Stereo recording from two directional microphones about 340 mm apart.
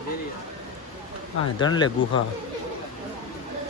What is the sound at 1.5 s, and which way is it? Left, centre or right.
Speech, centre.